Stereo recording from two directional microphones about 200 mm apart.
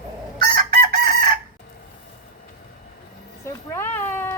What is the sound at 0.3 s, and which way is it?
Chicken, 45° right (ahead or behind).